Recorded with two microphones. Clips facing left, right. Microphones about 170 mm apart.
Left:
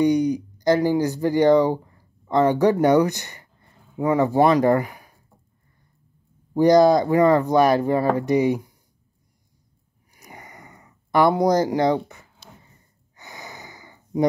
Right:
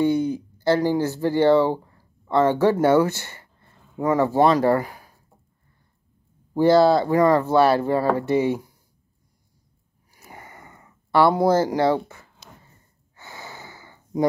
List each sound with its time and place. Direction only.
0.0 s speech: 15° left (ahead or behind)
6.5 s speech: 15° left (ahead or behind)
10.1 s a sound: 15° left (ahead or behind)
13.1 s breathing: 15° left (ahead or behind)